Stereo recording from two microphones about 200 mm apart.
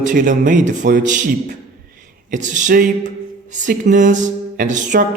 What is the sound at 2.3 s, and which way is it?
A man's voice, 40° right (ahead or behind).